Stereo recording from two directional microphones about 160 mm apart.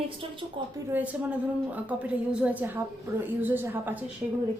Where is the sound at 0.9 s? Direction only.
10° right (ahead or behind).